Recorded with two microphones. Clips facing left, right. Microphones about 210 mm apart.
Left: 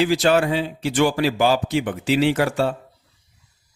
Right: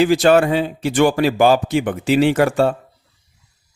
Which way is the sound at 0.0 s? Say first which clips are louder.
Right 5 dB; 50° right (ahead or behind).